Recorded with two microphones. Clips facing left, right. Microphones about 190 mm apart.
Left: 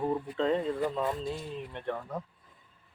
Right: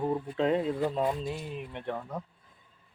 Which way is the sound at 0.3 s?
15° right (ahead or behind).